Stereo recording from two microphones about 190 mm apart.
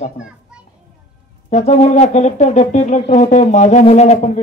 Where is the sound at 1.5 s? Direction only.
35° left (ahead or behind).